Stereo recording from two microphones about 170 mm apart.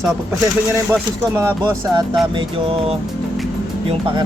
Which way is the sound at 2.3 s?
30° right (ahead or behind).